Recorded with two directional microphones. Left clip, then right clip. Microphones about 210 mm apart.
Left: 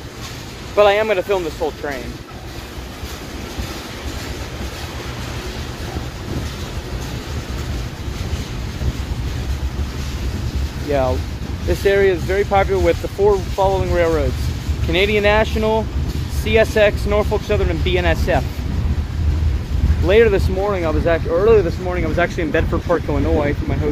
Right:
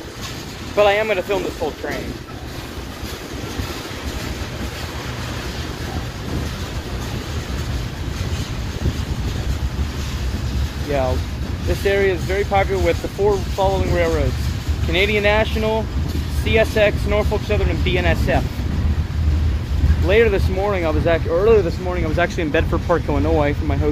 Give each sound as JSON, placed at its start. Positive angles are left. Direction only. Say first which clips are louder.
{"t": 0.7, "sound": "speech", "louder": "left 2 dB", "side_deg": 20}
{"t": 10.9, "sound": "speech", "louder": "left 2 dB", "side_deg": 20}
{"t": 20.1, "sound": "speech", "louder": "left 3 dB", "side_deg": 20}
{"t": 20.6, "sound": "speech", "louder": "right 2 dB", "side_deg": 5}